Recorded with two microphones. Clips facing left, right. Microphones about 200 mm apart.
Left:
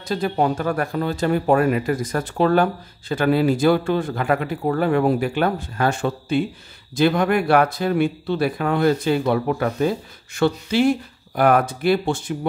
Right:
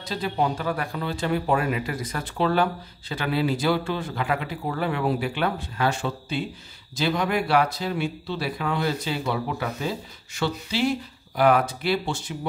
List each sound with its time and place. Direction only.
0.0 s speech: 50° left (ahead or behind)